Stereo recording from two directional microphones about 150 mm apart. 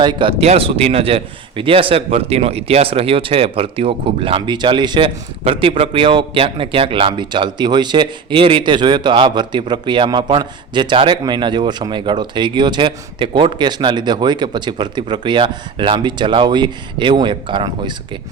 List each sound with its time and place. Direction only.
0.0 s a man's voice: 30° right (ahead or behind)